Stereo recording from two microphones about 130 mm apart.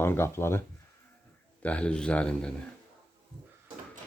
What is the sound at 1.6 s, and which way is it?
Speech, 10° left (ahead or behind).